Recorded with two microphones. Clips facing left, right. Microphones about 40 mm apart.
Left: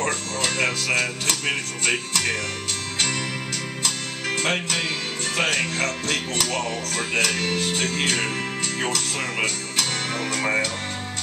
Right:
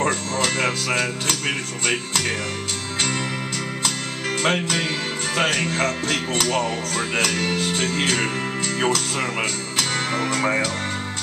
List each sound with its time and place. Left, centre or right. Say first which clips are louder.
0.0 s speech: right 3 dB; centre
3.8 s music: even; centre
8.7 s speech: right 5 dB; centre